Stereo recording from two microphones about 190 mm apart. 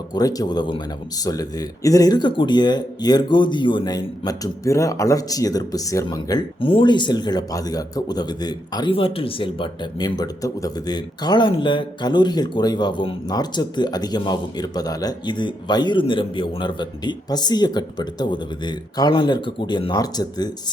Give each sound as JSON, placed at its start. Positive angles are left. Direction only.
{"t": 0.1, "sound": "speech", "side_deg": 20}